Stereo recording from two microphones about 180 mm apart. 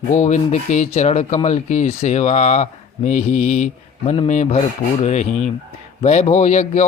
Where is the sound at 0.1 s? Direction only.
40° left (ahead or behind).